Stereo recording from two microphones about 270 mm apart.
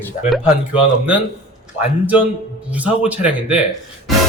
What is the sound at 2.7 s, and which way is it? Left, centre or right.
Speech, centre.